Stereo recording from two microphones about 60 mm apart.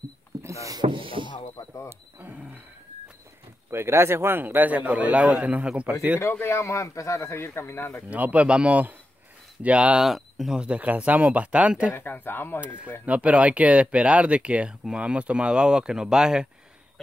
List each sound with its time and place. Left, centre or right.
0.4 s a sound: right
2.1 s speech: right
3.7 s speech: right
6.2 s speech: left
6.7 s speech: left
8.1 s speech: right
10.0 s speech: centre
10.6 s speech: right
12.0 s speech: left
12.5 s speech: right